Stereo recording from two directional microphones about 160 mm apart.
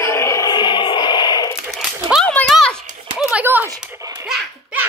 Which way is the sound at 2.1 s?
5° left (ahead or behind).